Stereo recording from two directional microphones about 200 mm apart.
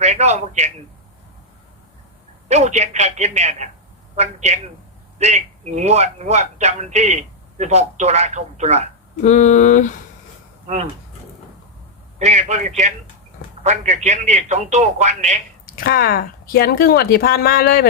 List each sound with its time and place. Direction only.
0.0 s a man's voice: 35° right (ahead or behind)
2.5 s a man's voice: 35° right (ahead or behind)
9.2 s speech: 35° left (ahead or behind)
12.2 s a man's voice: 35° right (ahead or behind)
15.6 s speech: 50° left (ahead or behind)